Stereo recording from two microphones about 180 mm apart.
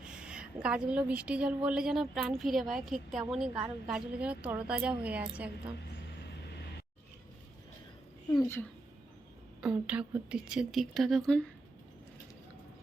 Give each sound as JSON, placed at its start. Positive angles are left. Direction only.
{"t": 0.0, "sound": "a woman's voice", "side_deg": -5}
{"t": 8.3, "sound": "speech", "side_deg": 20}
{"t": 9.6, "sound": "a woman's voice", "side_deg": -5}